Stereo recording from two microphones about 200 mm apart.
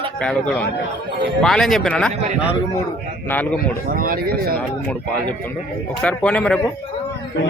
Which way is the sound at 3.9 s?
45° right (ahead or behind).